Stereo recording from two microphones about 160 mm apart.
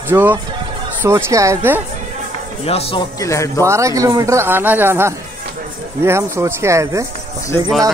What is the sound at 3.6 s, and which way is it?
Speech, 20° right (ahead or behind).